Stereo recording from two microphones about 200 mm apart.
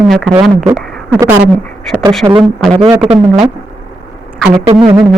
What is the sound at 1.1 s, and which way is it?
Speech, 10° right (ahead or behind).